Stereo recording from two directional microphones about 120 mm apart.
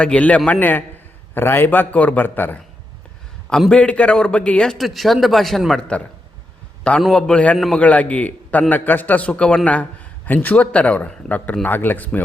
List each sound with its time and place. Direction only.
0.0 s a man's voice: 10° left (ahead or behind)
7.0 s speech: 5° left (ahead or behind)